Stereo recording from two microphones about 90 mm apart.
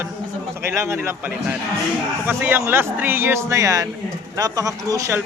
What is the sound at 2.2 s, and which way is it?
Speech, 20° right (ahead or behind).